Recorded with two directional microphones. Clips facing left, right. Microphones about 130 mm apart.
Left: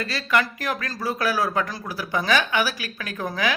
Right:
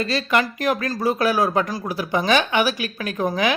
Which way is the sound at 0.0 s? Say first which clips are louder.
Right 3 dB; 20° right (ahead or behind).